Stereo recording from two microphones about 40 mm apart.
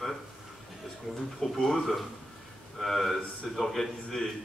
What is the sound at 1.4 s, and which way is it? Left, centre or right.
A man's voice, centre.